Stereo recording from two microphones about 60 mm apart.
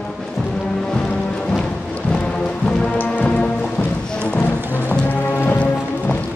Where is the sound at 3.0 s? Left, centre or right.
Left.